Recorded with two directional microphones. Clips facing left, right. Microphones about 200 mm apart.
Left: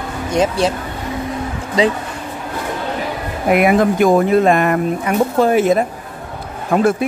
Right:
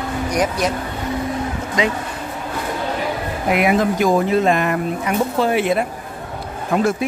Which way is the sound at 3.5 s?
50° left (ahead or behind).